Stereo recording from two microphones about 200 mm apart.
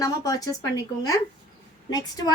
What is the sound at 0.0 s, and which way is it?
Speech, 20° left (ahead or behind).